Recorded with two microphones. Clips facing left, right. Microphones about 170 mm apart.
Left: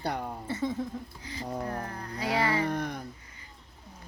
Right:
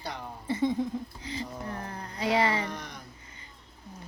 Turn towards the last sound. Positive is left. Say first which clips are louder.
# left 7 dB
turn(degrees=55)  # may be behind; listen again after turning